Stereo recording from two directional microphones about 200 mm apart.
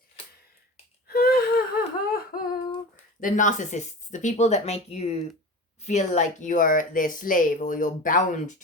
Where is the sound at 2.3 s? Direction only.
45° left (ahead or behind).